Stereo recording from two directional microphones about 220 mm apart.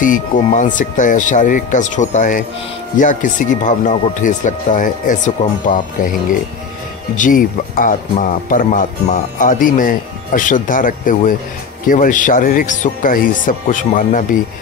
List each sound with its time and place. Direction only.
0.0 s speech: 35° left (ahead or behind)
7.2 s speech: 35° left (ahead or behind)